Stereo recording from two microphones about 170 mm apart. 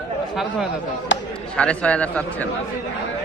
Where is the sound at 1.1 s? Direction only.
90° left.